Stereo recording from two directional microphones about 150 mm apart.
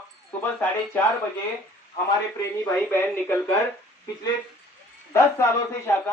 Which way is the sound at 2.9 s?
15° left (ahead or behind).